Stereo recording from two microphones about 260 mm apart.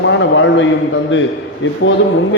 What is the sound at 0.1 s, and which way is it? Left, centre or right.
Speech, left.